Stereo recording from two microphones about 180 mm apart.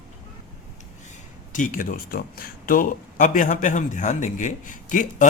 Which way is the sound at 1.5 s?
45° left (ahead or behind).